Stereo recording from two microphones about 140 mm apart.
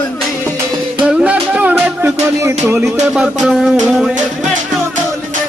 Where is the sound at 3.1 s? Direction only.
5° right (ahead or behind).